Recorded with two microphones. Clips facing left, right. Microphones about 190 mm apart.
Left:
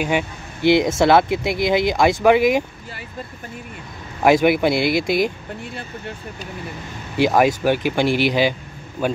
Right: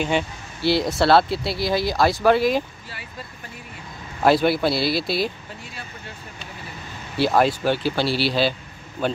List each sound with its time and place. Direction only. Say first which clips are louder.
0.0 s speech: left 1 dB; 15° left (ahead or behind)
4.2 s speech: left 3 dB; 15° left (ahead or behind)
7.2 s speech: left 3 dB; 15° left (ahead or behind)